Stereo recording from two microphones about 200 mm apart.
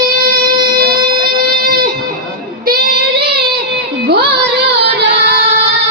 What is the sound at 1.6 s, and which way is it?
Music, 45° right (ahead or behind).